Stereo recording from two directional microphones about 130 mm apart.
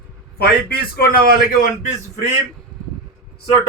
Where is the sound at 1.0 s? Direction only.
90° left.